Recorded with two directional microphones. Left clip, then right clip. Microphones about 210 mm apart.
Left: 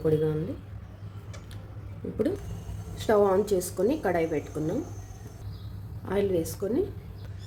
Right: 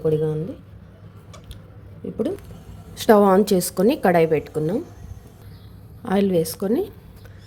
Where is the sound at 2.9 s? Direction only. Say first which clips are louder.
Right 8 dB; 45° right (ahead or behind).